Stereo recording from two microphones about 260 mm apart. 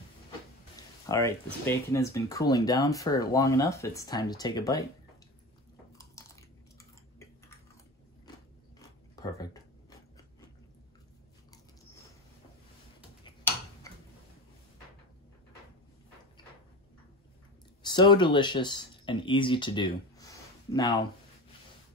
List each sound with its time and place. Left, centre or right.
1.0 s speech: centre
5.9 s chewing: centre
9.1 s a sound: centre
17.8 s speech: centre